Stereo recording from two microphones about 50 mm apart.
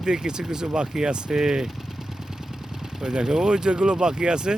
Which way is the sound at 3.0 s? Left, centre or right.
Centre.